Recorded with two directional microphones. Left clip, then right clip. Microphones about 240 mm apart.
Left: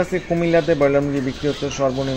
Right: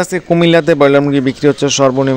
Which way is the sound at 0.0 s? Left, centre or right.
Right.